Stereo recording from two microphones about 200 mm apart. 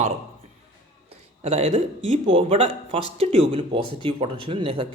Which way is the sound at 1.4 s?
30° right (ahead or behind).